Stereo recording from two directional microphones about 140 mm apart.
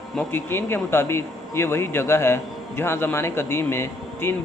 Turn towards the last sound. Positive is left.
turn(degrees=15)  # may be behind; listen again after turning